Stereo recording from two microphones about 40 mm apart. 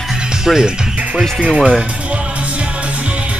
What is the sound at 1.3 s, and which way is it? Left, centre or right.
Speech, right.